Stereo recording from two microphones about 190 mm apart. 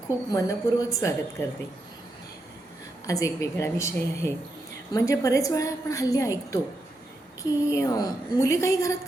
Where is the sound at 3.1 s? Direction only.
15° left (ahead or behind).